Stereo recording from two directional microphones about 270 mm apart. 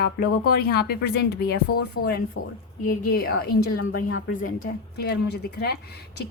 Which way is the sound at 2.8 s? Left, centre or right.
Left.